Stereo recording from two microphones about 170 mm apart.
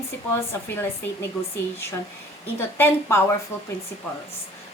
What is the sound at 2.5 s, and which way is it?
A woman's voice, 15° left (ahead or behind).